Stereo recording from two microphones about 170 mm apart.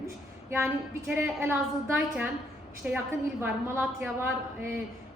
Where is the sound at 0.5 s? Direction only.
15° right (ahead or behind).